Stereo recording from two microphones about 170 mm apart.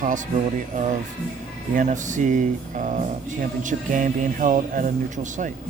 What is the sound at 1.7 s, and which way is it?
Speech, 50° right (ahead or behind).